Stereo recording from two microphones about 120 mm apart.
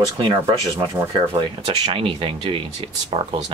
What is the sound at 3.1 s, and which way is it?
Speech, 55° right (ahead or behind).